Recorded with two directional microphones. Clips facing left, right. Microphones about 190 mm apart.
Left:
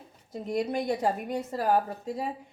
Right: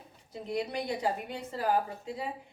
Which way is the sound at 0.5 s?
45° left (ahead or behind).